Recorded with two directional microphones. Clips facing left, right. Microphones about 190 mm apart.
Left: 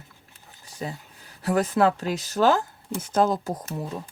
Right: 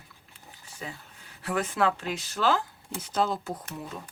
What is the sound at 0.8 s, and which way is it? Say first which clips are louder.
Speech: left 7 dB; 40° left (ahead or behind).